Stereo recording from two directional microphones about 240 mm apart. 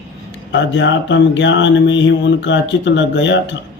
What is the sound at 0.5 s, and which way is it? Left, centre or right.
Speech, left.